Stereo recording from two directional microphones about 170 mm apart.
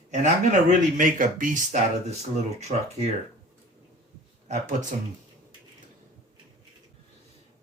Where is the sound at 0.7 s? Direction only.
50° right (ahead or behind).